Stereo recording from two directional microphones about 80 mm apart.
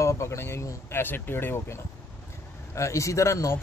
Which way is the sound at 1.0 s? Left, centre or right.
Left.